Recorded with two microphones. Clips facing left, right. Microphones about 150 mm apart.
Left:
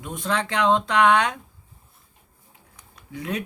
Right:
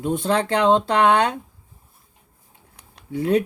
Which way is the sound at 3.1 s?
30° right (ahead or behind).